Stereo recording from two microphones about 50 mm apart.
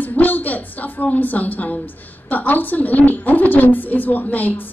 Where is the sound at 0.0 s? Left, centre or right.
Left.